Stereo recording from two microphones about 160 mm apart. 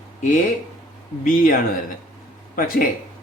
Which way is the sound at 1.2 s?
55° left (ahead or behind).